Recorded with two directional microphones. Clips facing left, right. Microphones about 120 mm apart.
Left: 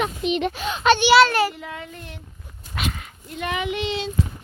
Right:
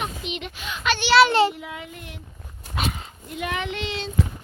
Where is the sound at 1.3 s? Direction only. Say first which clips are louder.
Right 3 dB; 25° right (ahead or behind).